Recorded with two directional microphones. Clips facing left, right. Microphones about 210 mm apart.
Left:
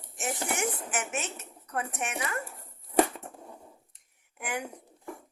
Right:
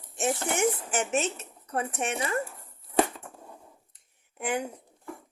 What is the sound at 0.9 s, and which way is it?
Speech, 30° right (ahead or behind).